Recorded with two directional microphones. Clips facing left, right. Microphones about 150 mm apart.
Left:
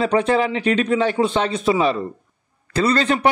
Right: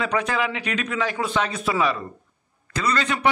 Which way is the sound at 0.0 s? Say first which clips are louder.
Left 6 dB; 30° left (ahead or behind).